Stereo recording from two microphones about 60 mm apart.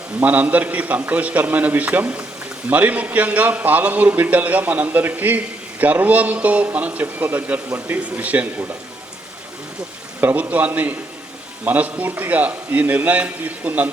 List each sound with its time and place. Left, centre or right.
0.2 s a man's voice: right
10.2 s a man's voice: right